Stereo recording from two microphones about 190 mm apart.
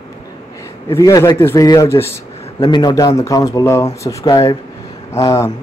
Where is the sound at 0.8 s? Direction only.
15° left (ahead or behind).